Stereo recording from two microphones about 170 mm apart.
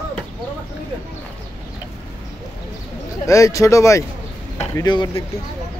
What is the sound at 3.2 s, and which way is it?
Speech, 20° left (ahead or behind).